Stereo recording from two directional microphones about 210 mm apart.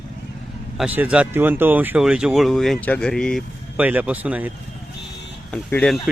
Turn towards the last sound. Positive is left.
turn(degrees=5)  # may be behind; listen again after turning